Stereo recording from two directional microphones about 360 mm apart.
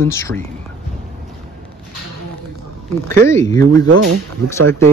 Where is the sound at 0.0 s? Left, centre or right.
Centre.